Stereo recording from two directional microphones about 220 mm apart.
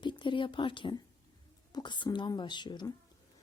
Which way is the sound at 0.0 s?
20° left (ahead or behind).